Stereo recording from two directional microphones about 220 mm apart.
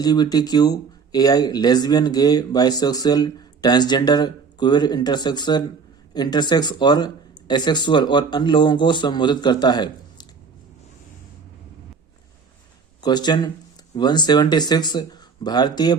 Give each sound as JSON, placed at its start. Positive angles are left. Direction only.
{"t": 0.0, "sound": "speech", "side_deg": 20}
{"t": 13.0, "sound": "speech", "side_deg": 20}